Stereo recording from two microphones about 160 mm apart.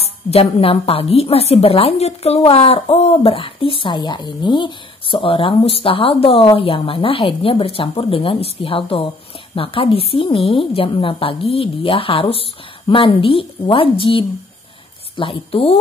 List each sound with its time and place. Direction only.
0.3 s a woman's voice: 35° left (ahead or behind)